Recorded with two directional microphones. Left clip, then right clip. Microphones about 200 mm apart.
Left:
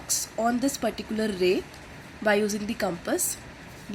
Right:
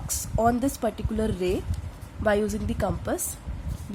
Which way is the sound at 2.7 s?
10° right (ahead or behind).